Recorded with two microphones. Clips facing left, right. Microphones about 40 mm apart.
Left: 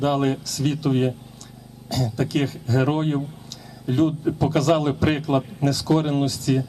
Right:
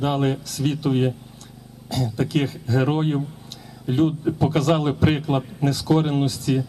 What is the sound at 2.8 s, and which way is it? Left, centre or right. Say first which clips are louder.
Speech: even; centre.